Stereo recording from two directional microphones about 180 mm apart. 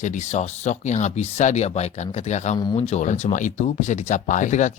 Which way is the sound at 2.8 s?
40° left (ahead or behind).